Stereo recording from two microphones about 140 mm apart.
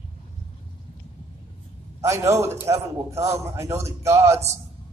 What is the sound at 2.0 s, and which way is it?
A man's voice, 20° right (ahead or behind).